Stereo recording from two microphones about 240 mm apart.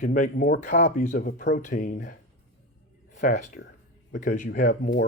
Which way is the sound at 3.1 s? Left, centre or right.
Left.